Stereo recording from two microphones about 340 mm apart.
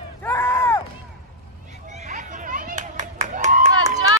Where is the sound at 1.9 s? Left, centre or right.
Right.